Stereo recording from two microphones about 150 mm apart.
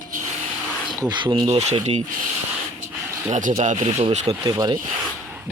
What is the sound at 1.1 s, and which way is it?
Speech, 35° right (ahead or behind).